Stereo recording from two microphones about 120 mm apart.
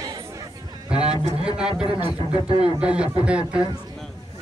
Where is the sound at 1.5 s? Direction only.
5° right (ahead or behind).